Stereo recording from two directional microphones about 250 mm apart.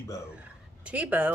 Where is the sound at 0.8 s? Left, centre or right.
Centre.